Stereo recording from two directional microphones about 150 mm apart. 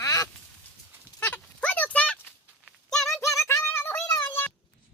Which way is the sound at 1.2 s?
10° left (ahead or behind).